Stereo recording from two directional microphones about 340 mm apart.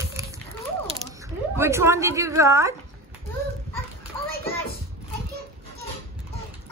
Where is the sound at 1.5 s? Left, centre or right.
Centre.